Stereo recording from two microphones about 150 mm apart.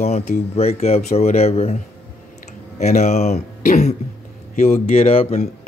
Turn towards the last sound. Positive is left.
turn(degrees=45)  # may be behind; listen again after turning